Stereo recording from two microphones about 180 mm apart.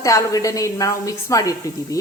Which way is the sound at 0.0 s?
20° left (ahead or behind).